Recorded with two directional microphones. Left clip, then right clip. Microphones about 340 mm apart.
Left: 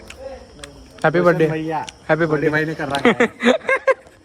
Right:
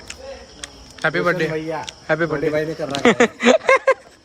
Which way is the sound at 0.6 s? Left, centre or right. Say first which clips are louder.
Left 3 dB; centre.